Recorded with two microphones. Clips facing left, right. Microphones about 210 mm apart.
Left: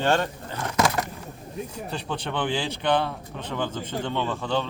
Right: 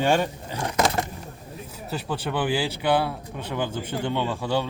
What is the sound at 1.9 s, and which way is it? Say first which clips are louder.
Speech: right 5 dB; 5° right (ahead or behind).